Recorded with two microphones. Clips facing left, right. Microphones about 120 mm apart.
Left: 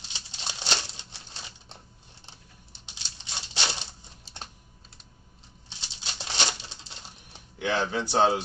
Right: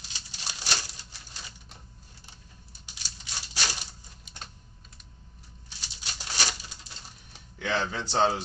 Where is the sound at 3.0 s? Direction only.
25° left (ahead or behind).